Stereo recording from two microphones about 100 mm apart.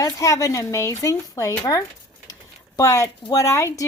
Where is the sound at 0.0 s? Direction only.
30° left (ahead or behind).